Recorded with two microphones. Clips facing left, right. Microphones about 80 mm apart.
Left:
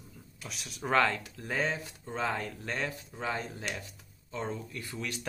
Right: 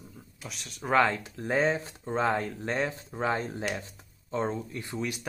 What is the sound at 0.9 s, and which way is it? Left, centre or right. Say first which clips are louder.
Speech: right 3 dB; right.